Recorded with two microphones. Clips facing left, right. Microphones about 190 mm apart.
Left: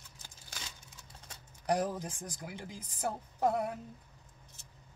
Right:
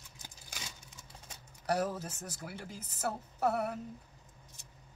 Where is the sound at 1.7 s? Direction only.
15° left (ahead or behind).